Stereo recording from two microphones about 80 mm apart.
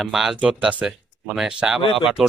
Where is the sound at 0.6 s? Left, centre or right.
Centre.